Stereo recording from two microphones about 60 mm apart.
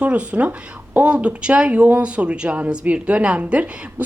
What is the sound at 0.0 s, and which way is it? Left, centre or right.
Speech, right.